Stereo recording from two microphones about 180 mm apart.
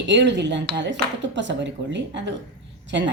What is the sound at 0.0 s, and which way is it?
A woman's voice, 75° right (ahead or behind).